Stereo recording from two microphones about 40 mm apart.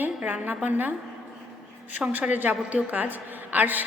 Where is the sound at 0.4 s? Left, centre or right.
Right.